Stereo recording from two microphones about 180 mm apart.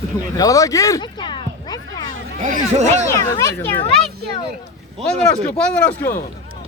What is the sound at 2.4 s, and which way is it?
Speech, 45° right (ahead or behind).